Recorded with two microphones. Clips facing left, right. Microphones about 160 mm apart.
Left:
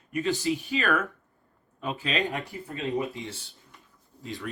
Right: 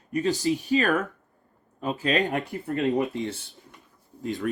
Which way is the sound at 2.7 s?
60° right (ahead or behind).